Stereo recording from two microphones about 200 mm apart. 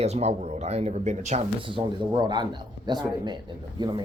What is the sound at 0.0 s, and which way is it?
Speech, 30° right (ahead or behind).